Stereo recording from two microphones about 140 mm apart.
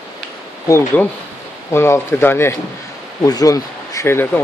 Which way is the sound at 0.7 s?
20° left (ahead or behind).